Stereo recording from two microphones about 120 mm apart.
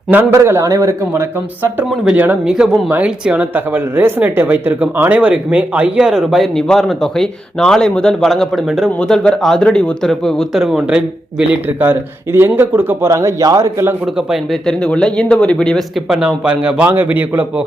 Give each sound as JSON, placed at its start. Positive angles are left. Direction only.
{"t": 0.1, "sound": "a man's voice", "side_deg": -20}
{"t": 2.0, "sound": "speech", "side_deg": -15}
{"t": 14.8, "sound": "speech", "side_deg": 10}